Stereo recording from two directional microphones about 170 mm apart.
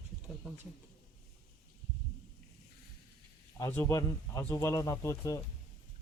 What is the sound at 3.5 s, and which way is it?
A man's voice, 15° left (ahead or behind).